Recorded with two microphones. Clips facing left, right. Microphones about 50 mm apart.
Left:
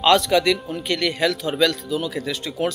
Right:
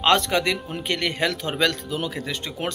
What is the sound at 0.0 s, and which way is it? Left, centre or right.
Speech, right.